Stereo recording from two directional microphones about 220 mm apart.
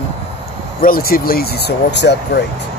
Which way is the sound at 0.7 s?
40° left (ahead or behind).